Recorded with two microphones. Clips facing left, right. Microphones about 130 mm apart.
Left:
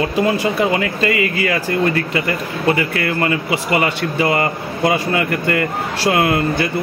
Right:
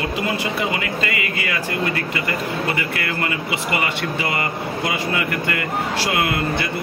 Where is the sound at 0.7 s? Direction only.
40° left (ahead or behind).